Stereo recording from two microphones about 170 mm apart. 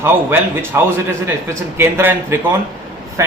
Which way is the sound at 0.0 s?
15° right (ahead or behind).